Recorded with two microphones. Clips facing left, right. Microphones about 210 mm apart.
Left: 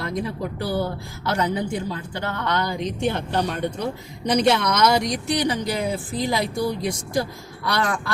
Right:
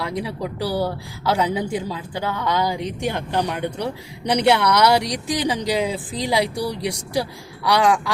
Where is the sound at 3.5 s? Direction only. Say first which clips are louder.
Even; 70° right (ahead or behind).